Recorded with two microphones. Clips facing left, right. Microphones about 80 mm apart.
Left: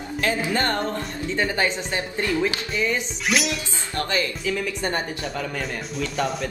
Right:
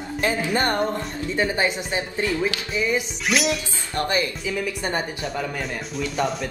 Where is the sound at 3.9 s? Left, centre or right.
Right.